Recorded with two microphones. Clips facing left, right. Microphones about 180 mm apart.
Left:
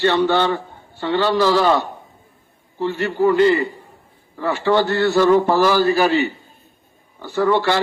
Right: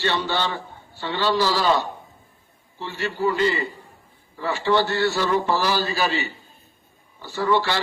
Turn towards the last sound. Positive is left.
turn(degrees=55)  # may be behind; listen again after turning